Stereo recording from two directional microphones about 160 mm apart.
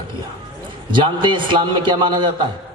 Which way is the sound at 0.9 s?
30° right (ahead or behind).